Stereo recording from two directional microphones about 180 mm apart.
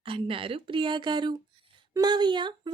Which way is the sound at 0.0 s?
30° right (ahead or behind).